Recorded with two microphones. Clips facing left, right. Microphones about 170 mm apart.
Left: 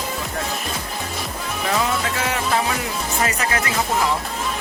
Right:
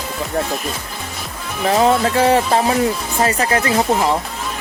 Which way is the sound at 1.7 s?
35° right (ahead or behind).